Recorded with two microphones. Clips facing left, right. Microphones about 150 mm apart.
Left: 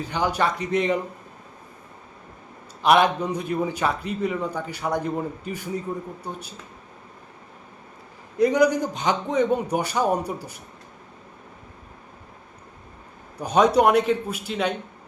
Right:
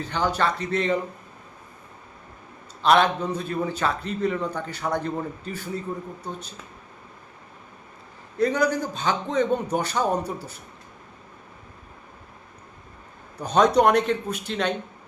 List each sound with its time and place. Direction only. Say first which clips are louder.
0.0 s a man's voice: left 1 dB; 10° left (ahead or behind)
2.8 s a man's voice: left 1 dB; 10° left (ahead or behind)
8.4 s a man's voice: left 4 dB; 15° left (ahead or behind)
13.4 s a man's voice: left 1 dB; 10° left (ahead or behind)